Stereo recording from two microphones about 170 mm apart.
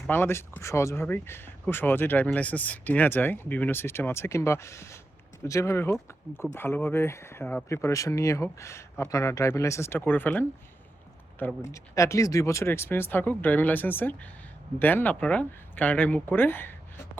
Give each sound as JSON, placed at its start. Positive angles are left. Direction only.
{"t": 0.1, "sound": "speech", "side_deg": 15}